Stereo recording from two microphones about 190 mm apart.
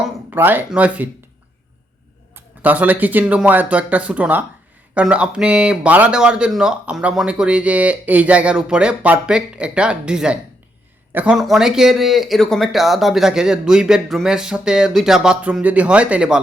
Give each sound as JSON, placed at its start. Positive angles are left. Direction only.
{"t": 0.0, "sound": "speech", "side_deg": -10}
{"t": 2.3, "sound": "speech", "side_deg": -10}